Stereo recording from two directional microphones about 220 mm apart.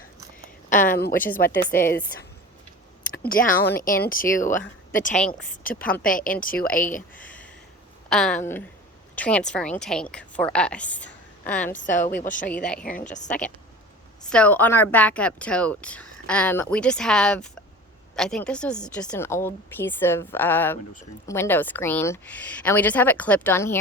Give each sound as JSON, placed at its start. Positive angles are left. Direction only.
{"t": 0.7, "sound": "a woman's voice", "side_deg": 35}
{"t": 3.2, "sound": "speech", "side_deg": 40}
{"t": 8.1, "sound": "a woman's voice", "side_deg": 5}
{"t": 11.8, "sound": "speech", "side_deg": 35}
{"t": 12.5, "sound": "speech", "side_deg": 5}
{"t": 12.8, "sound": "speech", "side_deg": 35}
{"t": 14.3, "sound": "a woman's voice", "side_deg": 5}